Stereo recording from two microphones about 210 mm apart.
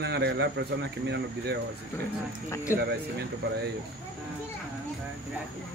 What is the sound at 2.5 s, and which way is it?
Speech, 15° left (ahead or behind).